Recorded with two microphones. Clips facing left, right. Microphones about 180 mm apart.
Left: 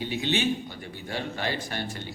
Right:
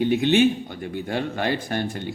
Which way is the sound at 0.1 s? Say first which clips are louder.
Right 7 dB; 55° right (ahead or behind).